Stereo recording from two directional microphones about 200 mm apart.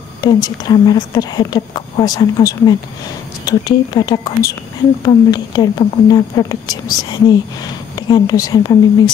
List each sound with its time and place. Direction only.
0.2 s speech: 20° left (ahead or behind)